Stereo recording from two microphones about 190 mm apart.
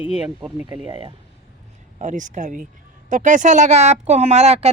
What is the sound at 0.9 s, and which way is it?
Speech, 25° right (ahead or behind).